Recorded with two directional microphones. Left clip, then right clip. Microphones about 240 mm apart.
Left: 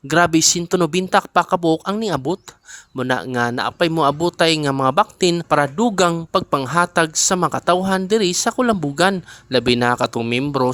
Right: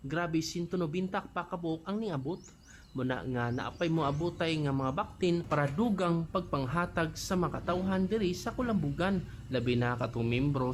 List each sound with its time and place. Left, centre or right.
0.1 s speech: left